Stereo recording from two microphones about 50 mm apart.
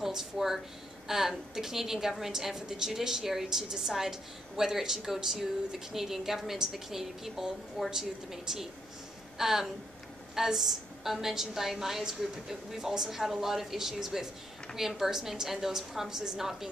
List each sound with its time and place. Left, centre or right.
0.0 s a woman's voice: centre